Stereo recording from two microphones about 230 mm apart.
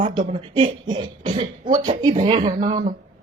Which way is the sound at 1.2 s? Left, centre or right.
Right.